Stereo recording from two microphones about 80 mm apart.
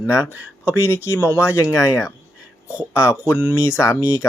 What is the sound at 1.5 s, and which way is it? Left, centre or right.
Speech, left.